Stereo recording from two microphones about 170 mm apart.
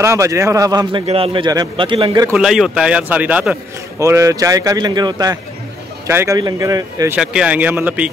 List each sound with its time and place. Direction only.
0.0 s a man's voice: 15° right (ahead or behind)
1.0 s a man's voice: 35° right (ahead or behind)
2.3 s speech: 5° right (ahead or behind)
4.0 s a man's voice: 20° right (ahead or behind)
7.2 s a man's voice: 5° right (ahead or behind)